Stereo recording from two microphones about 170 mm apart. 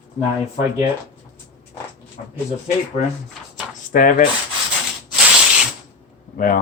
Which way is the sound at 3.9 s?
50° left (ahead or behind).